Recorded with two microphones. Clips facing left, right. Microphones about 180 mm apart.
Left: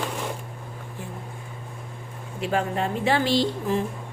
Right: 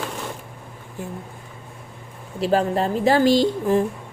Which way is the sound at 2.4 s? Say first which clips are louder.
Right 5 dB; 35° right (ahead or behind).